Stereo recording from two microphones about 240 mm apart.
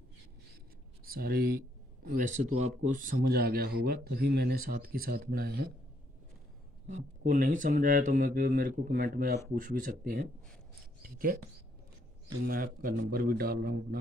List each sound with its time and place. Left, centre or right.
1.0 s speech: right
7.0 s speech: right
12.4 s speech: right